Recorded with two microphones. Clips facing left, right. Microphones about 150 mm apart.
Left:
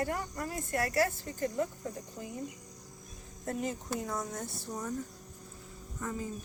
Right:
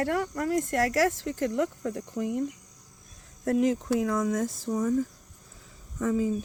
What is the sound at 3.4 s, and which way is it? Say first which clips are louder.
Speech: right 11 dB; 85° right.